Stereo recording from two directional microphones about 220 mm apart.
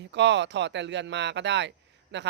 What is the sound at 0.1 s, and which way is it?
Speech, 55° right (ahead or behind).